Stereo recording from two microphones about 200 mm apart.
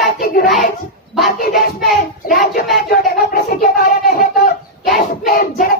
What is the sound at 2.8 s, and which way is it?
Music, 45° left (ahead or behind).